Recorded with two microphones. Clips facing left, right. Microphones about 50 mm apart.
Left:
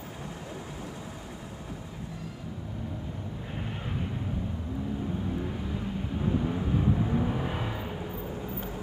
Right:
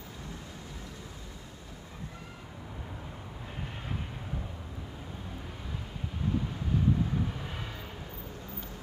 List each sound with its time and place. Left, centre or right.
6.2 s vehicle: centre